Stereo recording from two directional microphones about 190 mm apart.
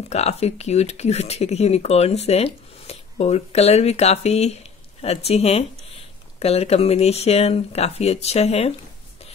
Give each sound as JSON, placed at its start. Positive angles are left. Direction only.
{"t": 0.1, "sound": "speech", "side_deg": 35}